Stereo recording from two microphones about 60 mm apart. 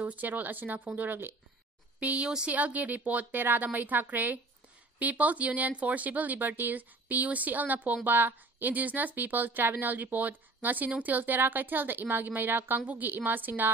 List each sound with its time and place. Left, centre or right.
0.0 s speech: right
2.0 s a woman's voice: right